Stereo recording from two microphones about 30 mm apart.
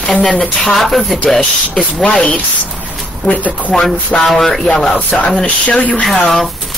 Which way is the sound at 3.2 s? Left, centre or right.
Left.